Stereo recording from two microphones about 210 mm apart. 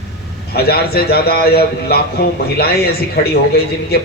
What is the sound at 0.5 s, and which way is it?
A man's voice, 50° left (ahead or behind).